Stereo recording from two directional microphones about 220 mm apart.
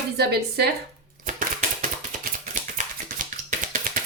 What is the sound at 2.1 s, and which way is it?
Music, 35° right (ahead or behind).